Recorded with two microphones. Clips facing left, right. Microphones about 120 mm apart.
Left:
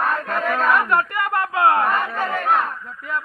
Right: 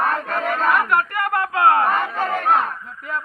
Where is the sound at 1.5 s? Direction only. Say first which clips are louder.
Right 1 dB; 20° left (ahead or behind).